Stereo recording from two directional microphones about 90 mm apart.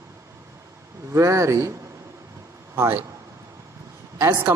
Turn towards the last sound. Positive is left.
turn(degrees=-35)  # may be behind; listen again after turning